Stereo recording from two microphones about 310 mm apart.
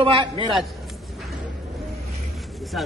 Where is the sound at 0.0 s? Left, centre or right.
Centre.